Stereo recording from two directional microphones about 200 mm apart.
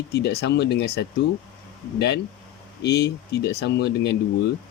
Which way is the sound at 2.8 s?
55° left (ahead or behind).